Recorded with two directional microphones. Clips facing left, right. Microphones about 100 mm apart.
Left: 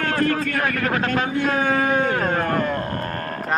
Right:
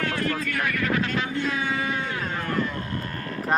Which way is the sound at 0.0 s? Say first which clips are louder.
Left 6 dB; 50° left (ahead or behind).